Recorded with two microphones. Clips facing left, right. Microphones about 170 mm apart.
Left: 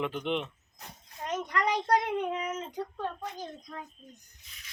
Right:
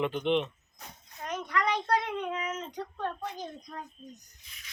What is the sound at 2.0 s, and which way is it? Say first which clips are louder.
Speech: left 2 dB; 20° left (ahead or behind).